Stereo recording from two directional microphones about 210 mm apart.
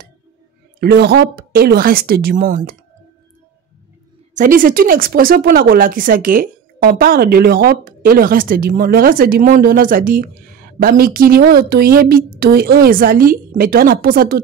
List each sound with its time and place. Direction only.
0.7 s speech: 50° right (ahead or behind)
4.4 s speech: 40° right (ahead or behind)